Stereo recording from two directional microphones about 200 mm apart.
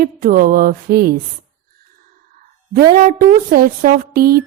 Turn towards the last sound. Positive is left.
turn(degrees=-50)  # may be behind; listen again after turning